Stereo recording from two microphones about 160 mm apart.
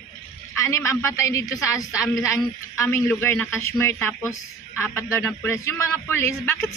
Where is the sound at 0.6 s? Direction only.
20° left (ahead or behind).